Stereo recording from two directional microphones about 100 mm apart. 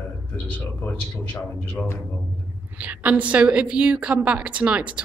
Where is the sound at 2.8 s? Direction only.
15° right (ahead or behind).